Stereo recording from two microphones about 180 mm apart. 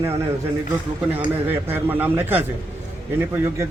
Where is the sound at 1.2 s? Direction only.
10° right (ahead or behind).